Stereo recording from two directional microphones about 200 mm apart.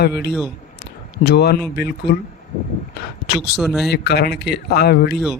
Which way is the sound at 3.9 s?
55° left (ahead or behind).